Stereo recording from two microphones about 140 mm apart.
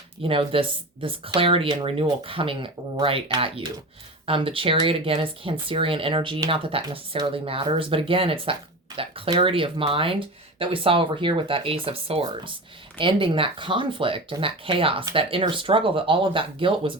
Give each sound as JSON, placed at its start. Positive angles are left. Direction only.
{"t": 0.2, "sound": "speech", "side_deg": -40}